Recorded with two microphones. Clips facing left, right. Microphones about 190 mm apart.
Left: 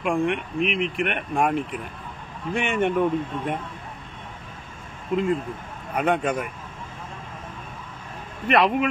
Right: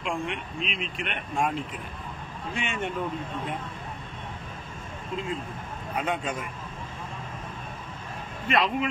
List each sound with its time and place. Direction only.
0.0 s speech: 60° left (ahead or behind)
5.1 s speech: 60° left (ahead or behind)
8.5 s speech: 65° left (ahead or behind)